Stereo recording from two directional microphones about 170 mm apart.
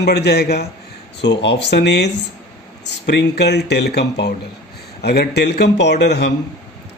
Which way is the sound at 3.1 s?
80° left.